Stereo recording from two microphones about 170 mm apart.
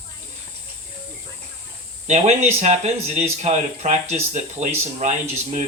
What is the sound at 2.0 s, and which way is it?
Speech, 40° right (ahead or behind).